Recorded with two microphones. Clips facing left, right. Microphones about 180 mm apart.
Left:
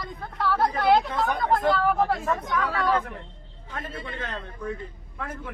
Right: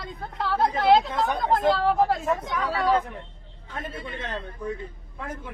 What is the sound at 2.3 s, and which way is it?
Speech, 20° right (ahead or behind).